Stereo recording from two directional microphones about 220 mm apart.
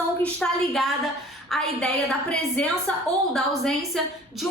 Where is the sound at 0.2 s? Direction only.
Centre (ahead or behind).